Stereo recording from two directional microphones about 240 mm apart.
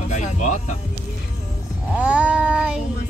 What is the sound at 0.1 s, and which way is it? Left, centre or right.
Music, left.